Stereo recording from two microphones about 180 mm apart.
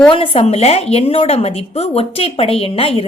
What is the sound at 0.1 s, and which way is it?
A woman's voice, 30° left (ahead or behind).